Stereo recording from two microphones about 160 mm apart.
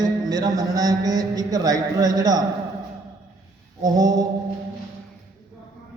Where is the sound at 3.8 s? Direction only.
25° right (ahead or behind).